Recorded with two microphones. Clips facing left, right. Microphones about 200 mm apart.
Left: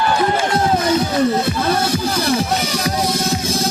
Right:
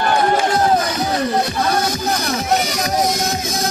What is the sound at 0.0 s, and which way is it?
Run, 55° right (ahead or behind).